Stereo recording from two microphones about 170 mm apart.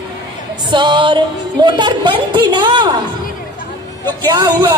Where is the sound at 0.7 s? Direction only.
25° right (ahead or behind).